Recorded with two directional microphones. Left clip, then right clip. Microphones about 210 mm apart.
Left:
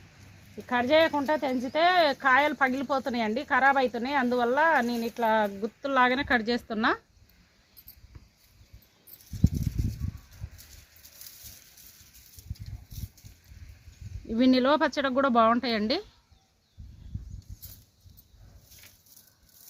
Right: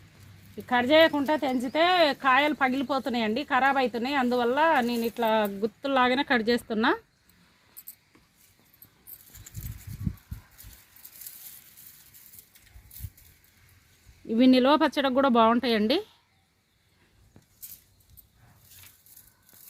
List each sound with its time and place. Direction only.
0.7 s speech: 40° right (ahead or behind)
14.3 s speech: 40° right (ahead or behind)